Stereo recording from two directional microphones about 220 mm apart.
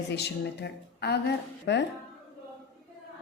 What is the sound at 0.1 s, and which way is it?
A woman's voice, 50° left (ahead or behind).